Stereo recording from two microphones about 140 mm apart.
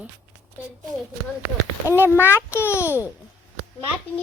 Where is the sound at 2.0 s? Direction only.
15° left (ahead or behind).